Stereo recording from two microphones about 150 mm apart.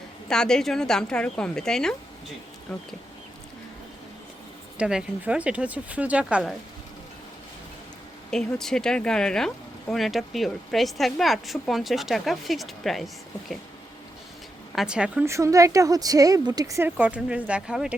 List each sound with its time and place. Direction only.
0.3 s speech: 5° left (ahead or behind)
4.8 s speech: 5° right (ahead or behind)
8.3 s speech: 5° left (ahead or behind)
14.8 s speech: 5° right (ahead or behind)
15.2 s speech: 20° right (ahead or behind)